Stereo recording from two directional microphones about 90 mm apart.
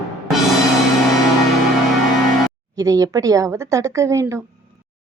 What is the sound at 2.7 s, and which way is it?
A woman's voice, 40° right (ahead or behind).